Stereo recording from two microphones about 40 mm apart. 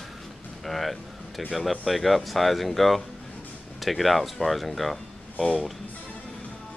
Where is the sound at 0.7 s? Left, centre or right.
Centre.